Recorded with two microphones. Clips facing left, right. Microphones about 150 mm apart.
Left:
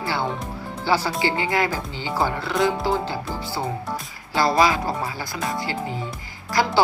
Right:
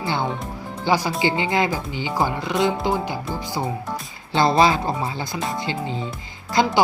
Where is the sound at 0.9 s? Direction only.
15° right (ahead or behind).